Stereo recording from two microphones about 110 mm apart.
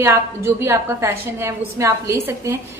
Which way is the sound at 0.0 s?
25° right (ahead or behind).